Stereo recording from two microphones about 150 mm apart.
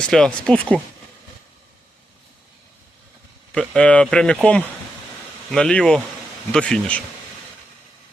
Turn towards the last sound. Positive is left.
turn(degrees=5)  # may be behind; listen again after turning